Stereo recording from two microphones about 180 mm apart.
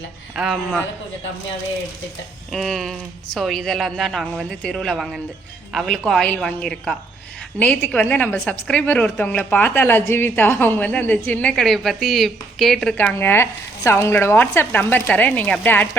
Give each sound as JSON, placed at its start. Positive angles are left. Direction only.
{"t": 0.3, "sound": "a woman's voice", "side_deg": 0}
{"t": 2.5, "sound": "a woman's voice", "side_deg": 0}